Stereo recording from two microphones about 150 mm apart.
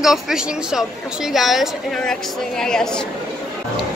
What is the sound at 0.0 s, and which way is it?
A woman's voice, 5° right (ahead or behind).